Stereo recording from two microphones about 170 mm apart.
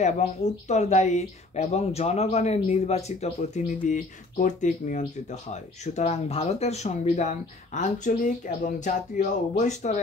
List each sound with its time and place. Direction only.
0.0 s a woman's voice: 45° left (ahead or behind)